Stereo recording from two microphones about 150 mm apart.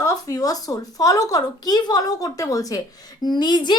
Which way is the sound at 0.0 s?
25° left (ahead or behind).